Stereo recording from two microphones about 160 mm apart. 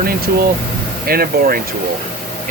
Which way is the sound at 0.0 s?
70° right (ahead or behind).